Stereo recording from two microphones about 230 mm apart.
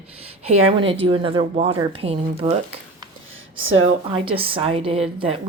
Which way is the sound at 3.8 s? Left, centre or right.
Right.